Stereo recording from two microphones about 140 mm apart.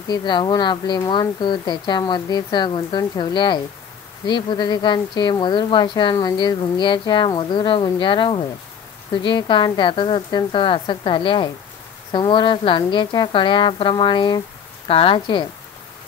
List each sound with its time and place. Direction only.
0.1 s a woman's voice: 35° left (ahead or behind)